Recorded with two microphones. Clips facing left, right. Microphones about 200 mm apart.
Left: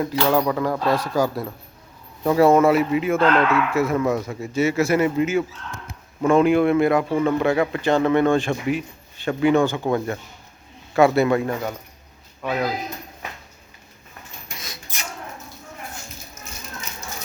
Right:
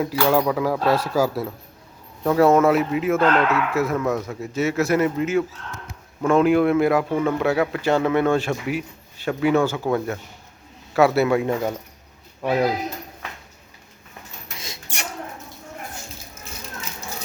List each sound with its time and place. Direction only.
0.0 s speech: 5° right (ahead or behind)
12.4 s speech: 30° right (ahead or behind)
14.9 s rodents: 70° right (ahead or behind)